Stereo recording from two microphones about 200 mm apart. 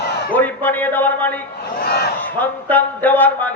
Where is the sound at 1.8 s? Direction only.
50° left (ahead or behind).